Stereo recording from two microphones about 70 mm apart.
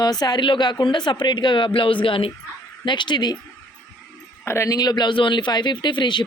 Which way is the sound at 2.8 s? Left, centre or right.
Left.